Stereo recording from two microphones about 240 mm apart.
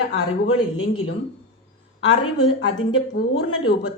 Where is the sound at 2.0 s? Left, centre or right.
Left.